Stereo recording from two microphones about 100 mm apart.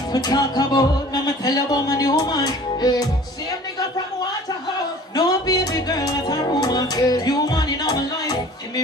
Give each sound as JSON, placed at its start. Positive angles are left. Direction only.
{"t": 0.1, "sound": "speech", "side_deg": 40}
{"t": 5.1, "sound": "music", "side_deg": 40}